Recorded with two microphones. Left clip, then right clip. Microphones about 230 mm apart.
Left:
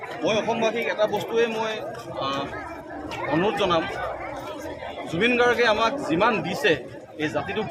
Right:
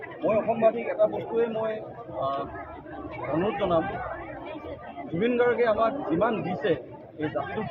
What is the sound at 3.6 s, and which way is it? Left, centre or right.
Speech, left.